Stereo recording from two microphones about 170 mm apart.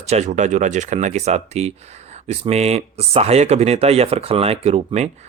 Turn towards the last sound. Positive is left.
turn(degrees=-40)  # may be behind; listen again after turning